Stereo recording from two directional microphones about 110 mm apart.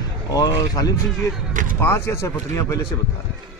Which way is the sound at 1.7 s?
20° left (ahead or behind).